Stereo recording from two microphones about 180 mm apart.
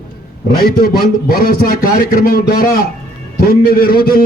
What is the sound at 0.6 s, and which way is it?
A man's voice, 55° left (ahead or behind).